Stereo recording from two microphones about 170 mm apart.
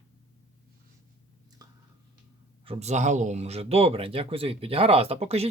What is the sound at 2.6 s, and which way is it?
Speech, 40° right (ahead or behind).